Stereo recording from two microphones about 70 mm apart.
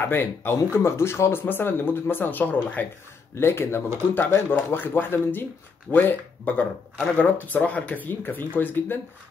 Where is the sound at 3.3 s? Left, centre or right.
Left.